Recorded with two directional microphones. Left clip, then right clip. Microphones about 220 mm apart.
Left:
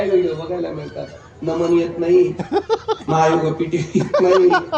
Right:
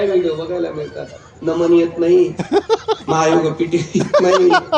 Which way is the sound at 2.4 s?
30° right (ahead or behind).